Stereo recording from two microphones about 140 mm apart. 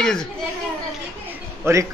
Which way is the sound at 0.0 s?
5° left (ahead or behind).